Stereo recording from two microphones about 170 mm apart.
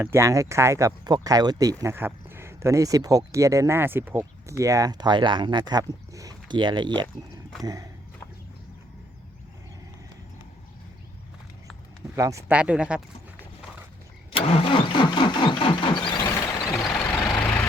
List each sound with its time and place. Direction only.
0.0 s speech: 15° right (ahead or behind)
12.1 s speech: 20° right (ahead or behind)
13.4 s a sound: 10° right (ahead or behind)
14.3 s vehicle: 35° left (ahead or behind); by 17.7 s 15° left (ahead or behind)